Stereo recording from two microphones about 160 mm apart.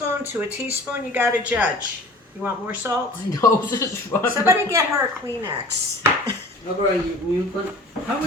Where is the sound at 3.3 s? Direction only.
20° left (ahead or behind).